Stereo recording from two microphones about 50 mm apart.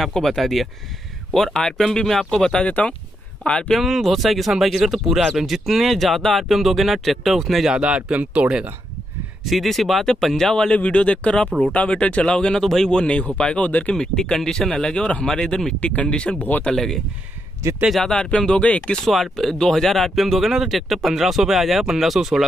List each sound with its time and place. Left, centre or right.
0.0 s speech: centre
2.5 s speech: left
3.7 s speech: centre
7.7 s speech: right
9.4 s speech: centre
10.7 s speech: left
13.9 s speech: centre
15.8 s speech: left
16.7 s speech: centre
18.1 s speech: centre
19.0 s speech: centre